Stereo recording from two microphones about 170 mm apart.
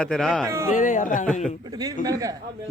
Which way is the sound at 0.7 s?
50° left (ahead or behind).